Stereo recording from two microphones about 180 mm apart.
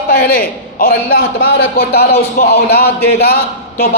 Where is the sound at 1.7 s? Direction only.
65° left (ahead or behind).